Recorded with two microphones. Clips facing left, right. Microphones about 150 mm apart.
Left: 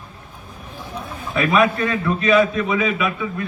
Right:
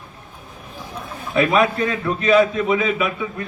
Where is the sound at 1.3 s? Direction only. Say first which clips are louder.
Even; 25° right (ahead or behind).